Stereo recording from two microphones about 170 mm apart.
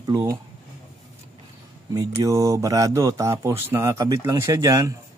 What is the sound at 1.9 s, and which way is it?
Speech, 20° right (ahead or behind).